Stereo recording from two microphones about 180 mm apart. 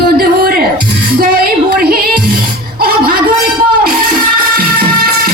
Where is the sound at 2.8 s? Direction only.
55° right (ahead or behind).